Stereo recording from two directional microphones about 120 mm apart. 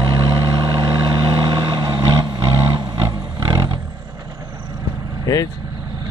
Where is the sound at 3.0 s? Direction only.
25° right (ahead or behind).